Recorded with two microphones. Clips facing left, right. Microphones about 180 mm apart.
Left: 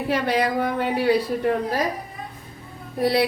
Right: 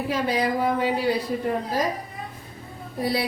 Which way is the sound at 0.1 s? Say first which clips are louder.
Left 3 dB; 70° left (ahead or behind).